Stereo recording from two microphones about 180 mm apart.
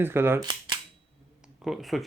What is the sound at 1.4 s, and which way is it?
Speech, centre (ahead or behind).